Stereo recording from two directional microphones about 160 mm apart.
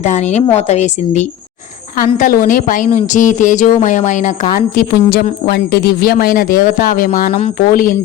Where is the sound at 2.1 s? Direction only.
60° left (ahead or behind).